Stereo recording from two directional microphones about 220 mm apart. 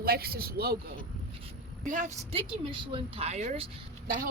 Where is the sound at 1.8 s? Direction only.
35° right (ahead or behind).